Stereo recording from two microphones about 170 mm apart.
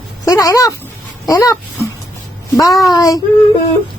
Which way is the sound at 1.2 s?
20° left (ahead or behind).